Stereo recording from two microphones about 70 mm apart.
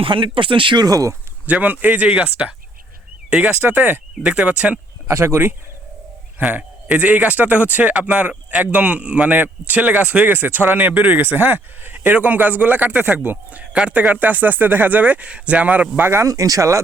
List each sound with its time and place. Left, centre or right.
0.8 s speech: right
1.5 s speech: right
2.0 s speech: centre
5.0 s speech: right
6.4 s speech: centre
16.0 s speech: right
16.2 s speech: right